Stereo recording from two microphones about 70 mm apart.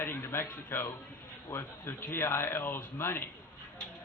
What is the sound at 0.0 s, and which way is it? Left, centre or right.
A man's voice, left.